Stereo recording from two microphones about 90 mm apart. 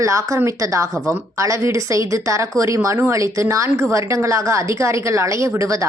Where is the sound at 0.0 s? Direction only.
35° right (ahead or behind).